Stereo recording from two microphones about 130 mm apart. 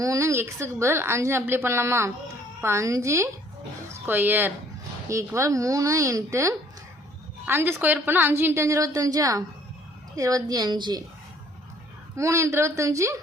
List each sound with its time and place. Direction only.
0.0 s a woman's voice: 25° right (ahead or behind)
12.1 s a woman's voice: 25° right (ahead or behind)